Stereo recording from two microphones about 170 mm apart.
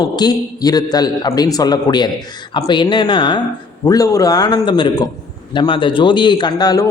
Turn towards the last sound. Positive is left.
turn(degrees=20)  # may be behind; listen again after turning